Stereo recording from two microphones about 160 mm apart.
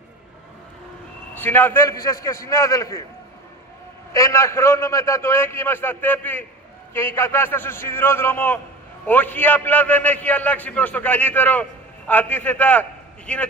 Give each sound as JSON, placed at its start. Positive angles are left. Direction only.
{"t": 1.4, "sound": "a man's voice", "side_deg": 10}
{"t": 4.1, "sound": "a man's voice", "side_deg": 20}